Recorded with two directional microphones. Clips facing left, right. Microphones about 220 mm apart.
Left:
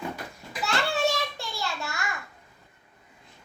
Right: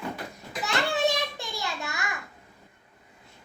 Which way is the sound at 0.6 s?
20° right (ahead or behind).